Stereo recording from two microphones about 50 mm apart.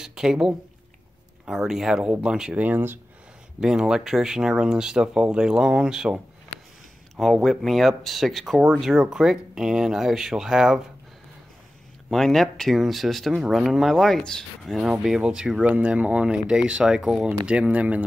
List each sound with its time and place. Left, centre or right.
0.0 s speech: centre
2.5 s speech: right
3.6 s speech: centre
7.4 s speech: centre
12.1 s speech: centre
14.8 s speech: centre
15.7 s speech: right; by 17.4 s centre
17.5 s speech: right